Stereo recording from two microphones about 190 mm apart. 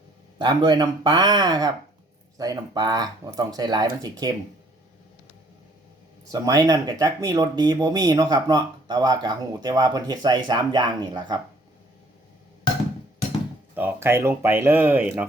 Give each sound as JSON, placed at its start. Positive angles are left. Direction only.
{"t": 0.3, "sound": "speech", "side_deg": -25}
{"t": 6.3, "sound": "speech", "side_deg": -20}
{"t": 13.7, "sound": "speech", "side_deg": -10}